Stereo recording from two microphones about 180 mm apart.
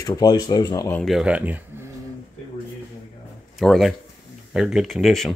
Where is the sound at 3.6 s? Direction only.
Centre (ahead or behind).